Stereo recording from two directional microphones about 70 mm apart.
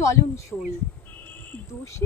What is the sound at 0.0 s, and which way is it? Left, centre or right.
Speech, left.